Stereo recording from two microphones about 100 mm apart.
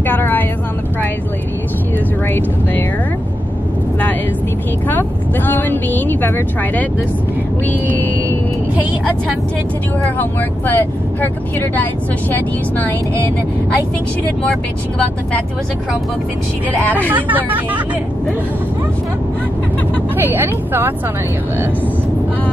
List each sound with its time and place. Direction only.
0.0 s vehicle: 20° left (ahead or behind)
4.8 s speech: 20° left (ahead or behind)
10.7 s speech: 20° left (ahead or behind)
17.1 s speech: 15° right (ahead or behind)
20.2 s speech: 20° right (ahead or behind)